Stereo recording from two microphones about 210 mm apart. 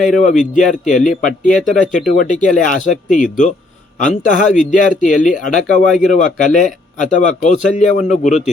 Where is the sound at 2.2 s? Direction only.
35° left (ahead or behind).